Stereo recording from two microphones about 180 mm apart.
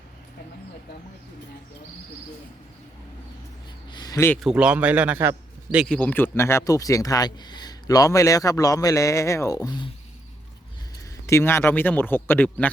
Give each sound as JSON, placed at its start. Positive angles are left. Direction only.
{"t": 3.8, "sound": "a sound", "side_deg": 25}
{"t": 4.4, "sound": "a man's voice", "side_deg": -5}
{"t": 5.8, "sound": "speech", "side_deg": 10}
{"t": 11.3, "sound": "speech", "side_deg": 15}